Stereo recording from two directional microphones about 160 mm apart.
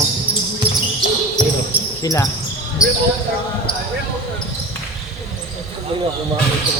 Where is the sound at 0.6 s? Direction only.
35° right (ahead or behind).